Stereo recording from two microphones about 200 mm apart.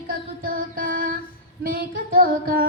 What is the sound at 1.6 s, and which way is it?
Female singing, 45° right (ahead or behind).